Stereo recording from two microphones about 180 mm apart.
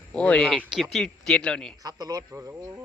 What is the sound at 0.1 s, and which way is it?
Speech, 5° left (ahead or behind).